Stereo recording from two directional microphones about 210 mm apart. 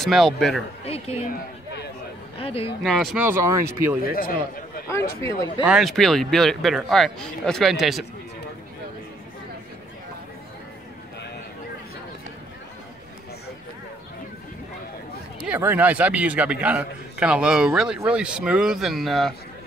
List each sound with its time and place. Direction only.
0.0 s a man's voice: centre (ahead or behind)
0.8 s a sound: 30° left (ahead or behind)
2.3 s speech: 25° left (ahead or behind)
2.8 s a man's voice: centre (ahead or behind)
3.3 s speech: 10° right (ahead or behind)
4.0 s a man's voice: 45° left (ahead or behind)
4.8 s speech: 15° left (ahead or behind)
5.6 s a man's voice: 5° right (ahead or behind)
15.4 s a man's voice: 10° right (ahead or behind)